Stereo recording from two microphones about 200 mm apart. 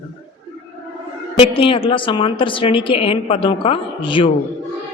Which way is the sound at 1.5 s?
25° left (ahead or behind).